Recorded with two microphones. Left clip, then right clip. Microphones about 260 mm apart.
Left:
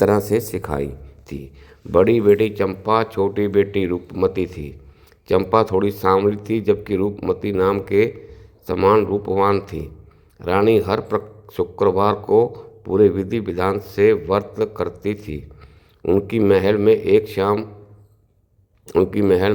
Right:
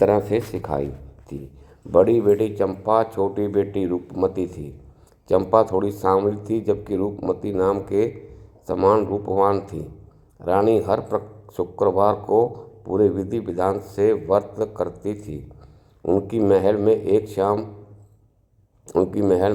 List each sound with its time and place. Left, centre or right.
0.0 s speech: left
1.9 s speech: left
18.9 s speech: left